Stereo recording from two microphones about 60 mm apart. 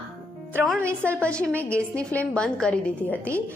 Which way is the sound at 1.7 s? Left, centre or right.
Centre.